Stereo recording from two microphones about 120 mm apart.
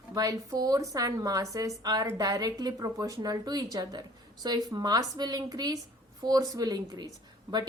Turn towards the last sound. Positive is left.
turn(degrees=-40)  # may be behind; listen again after turning